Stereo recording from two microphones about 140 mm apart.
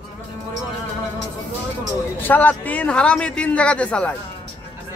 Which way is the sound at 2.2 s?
10° left (ahead or behind).